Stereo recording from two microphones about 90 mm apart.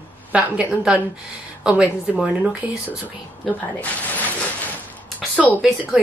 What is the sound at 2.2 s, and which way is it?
Speech, centre (ahead or behind).